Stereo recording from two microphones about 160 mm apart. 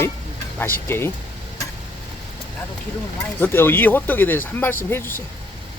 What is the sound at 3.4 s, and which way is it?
Speech, 15° left (ahead or behind).